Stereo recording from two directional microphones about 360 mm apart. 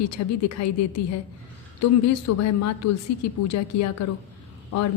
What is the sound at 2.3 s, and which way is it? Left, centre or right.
A woman's voice, left.